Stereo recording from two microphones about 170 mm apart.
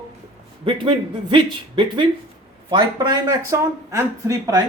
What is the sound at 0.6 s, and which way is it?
Speech, 30° right (ahead or behind).